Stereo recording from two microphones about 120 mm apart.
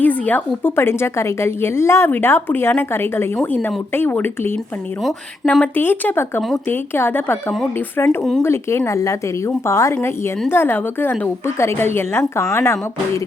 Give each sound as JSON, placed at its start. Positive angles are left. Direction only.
{"t": 0.0, "sound": "a woman's voice", "side_deg": 15}